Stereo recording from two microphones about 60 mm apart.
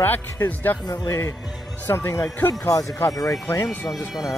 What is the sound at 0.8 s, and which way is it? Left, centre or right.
Speech, left.